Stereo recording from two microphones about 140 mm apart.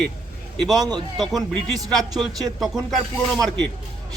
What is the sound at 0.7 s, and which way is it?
A man's voice, 30° right (ahead or behind).